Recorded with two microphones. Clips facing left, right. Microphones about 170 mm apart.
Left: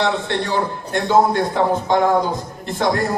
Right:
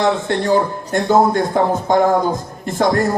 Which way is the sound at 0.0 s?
45° right (ahead or behind).